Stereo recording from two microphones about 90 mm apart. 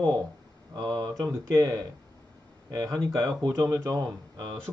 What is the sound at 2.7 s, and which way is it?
A man's voice, 40° right (ahead or behind).